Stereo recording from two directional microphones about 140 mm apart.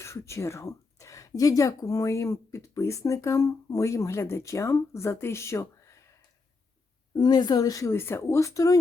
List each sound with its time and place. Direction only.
0.0 s speech: 20° left (ahead or behind)
7.1 s speech: 30° left (ahead or behind)